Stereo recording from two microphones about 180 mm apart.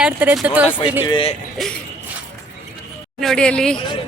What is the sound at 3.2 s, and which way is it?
Speech, 5° left (ahead or behind).